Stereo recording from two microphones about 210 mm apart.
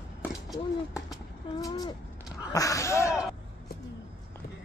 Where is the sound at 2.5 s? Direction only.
15° left (ahead or behind).